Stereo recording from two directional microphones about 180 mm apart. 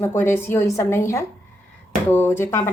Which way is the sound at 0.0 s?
15° left (ahead or behind).